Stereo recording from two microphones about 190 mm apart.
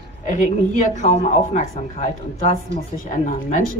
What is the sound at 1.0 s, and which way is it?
Speech, 40° left (ahead or behind).